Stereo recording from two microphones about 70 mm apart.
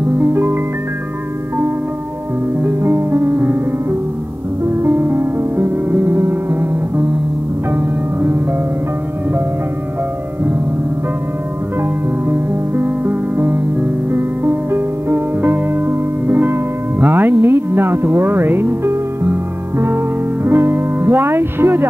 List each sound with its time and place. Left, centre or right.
0.3 s music: right
2.6 s music: right
4.6 s music: right
11.8 s music: right